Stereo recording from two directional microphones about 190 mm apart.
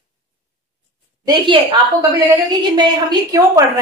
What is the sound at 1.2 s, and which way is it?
Speech, 25° right (ahead or behind).